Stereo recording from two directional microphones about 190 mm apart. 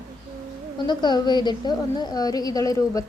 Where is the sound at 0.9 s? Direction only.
25° left (ahead or behind).